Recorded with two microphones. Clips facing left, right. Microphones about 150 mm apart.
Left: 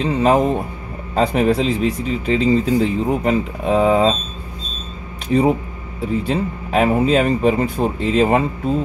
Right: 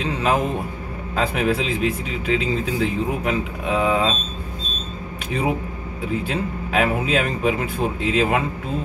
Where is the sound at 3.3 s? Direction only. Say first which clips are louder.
Left 5 dB; 40° left (ahead or behind).